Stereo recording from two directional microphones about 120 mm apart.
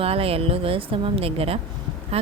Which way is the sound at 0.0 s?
50° right (ahead or behind).